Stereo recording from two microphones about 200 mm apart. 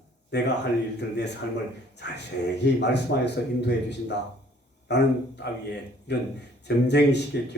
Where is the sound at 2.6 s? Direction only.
60° left (ahead or behind).